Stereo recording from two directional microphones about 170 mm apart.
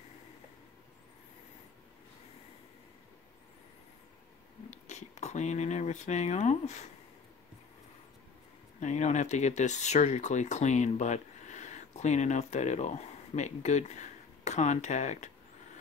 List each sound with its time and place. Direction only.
4.6 s speech: 45° left (ahead or behind)
8.7 s speech: 45° left (ahead or behind)